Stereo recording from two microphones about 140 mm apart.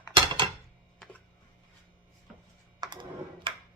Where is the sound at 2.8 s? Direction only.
30° right (ahead or behind).